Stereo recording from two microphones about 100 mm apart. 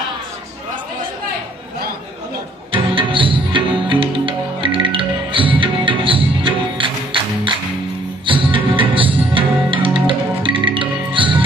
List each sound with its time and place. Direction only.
2.7 s music: 55° right (ahead or behind)